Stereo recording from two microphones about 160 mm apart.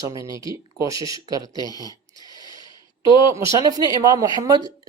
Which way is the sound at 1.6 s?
25° left (ahead or behind).